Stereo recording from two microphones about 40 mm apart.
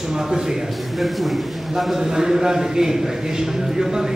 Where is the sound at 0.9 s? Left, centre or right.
Centre.